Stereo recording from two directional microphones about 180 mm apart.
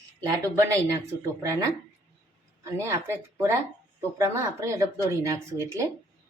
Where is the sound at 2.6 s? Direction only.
15° right (ahead or behind).